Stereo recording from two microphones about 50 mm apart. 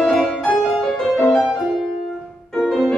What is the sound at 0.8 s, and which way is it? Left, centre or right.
Music, centre.